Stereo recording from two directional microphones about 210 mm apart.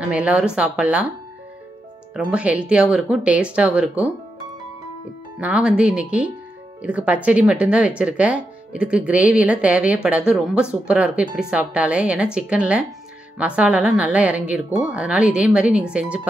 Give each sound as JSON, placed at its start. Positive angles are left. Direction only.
{"t": 0.0, "sound": "speech", "side_deg": -5}
{"t": 2.1, "sound": "speech", "side_deg": -5}
{"t": 5.4, "sound": "speech", "side_deg": -5}